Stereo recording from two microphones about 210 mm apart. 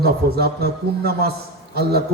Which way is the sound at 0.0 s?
50° right (ahead or behind).